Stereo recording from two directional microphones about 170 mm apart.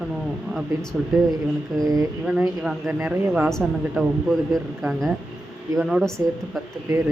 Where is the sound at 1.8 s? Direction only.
20° right (ahead or behind).